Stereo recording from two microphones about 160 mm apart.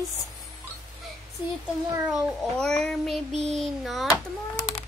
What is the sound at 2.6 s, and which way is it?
Speech, 5° left (ahead or behind).